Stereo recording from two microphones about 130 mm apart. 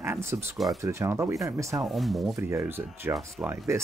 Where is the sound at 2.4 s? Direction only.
20° right (ahead or behind).